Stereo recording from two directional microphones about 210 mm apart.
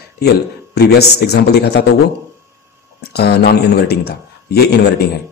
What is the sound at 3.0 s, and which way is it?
A man's voice, 50° left (ahead or behind).